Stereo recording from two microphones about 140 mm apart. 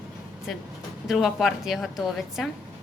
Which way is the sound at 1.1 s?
Centre (ahead or behind).